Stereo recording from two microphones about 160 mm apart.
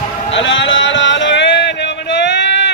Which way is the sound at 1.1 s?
90° left.